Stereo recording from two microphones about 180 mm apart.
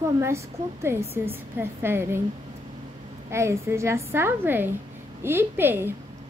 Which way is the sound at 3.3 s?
15° right (ahead or behind).